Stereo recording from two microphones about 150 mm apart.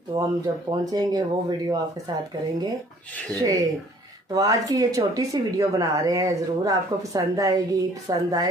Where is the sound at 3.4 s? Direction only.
20° right (ahead or behind).